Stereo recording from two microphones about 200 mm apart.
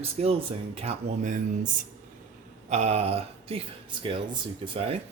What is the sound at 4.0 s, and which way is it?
Speech, 25° right (ahead or behind).